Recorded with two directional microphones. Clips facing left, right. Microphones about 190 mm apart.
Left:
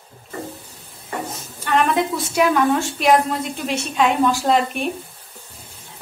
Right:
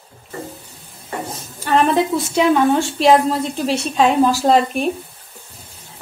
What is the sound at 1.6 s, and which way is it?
A woman's voice, 35° right (ahead or behind).